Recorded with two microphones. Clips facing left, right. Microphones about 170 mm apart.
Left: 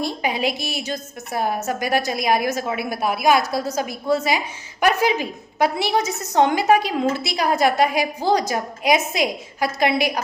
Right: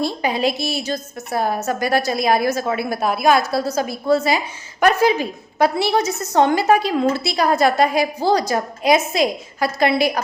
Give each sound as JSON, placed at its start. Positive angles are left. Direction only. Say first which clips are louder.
{"t": 0.0, "sound": "a woman's voice", "louder": "right 3 dB", "side_deg": 15}